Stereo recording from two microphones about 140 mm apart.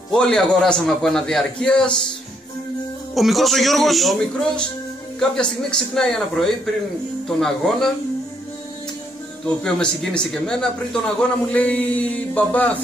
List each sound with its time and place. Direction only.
0.1 s a man's voice: 5° left (ahead or behind)
3.2 s a man's voice: centre (ahead or behind)
9.6 s a man's voice: 5° left (ahead or behind)